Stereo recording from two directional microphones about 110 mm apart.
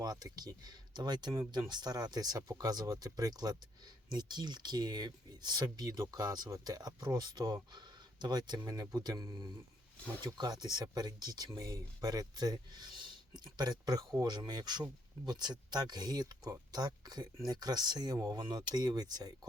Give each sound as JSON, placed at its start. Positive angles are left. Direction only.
{"t": 0.0, "sound": "speech", "side_deg": -35}